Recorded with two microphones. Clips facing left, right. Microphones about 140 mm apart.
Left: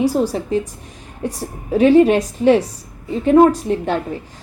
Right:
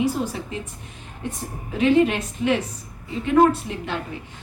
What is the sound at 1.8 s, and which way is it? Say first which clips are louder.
A woman's voice: left 7 dB; 35° left (ahead or behind).